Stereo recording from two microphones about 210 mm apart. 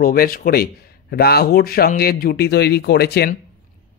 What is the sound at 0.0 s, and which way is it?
Speech, 45° left (ahead or behind).